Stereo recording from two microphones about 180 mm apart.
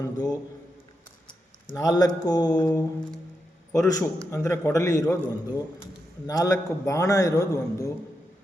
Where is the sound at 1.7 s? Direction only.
20° left (ahead or behind).